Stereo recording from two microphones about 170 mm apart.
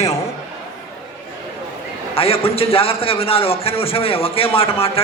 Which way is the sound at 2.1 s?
35° left (ahead or behind).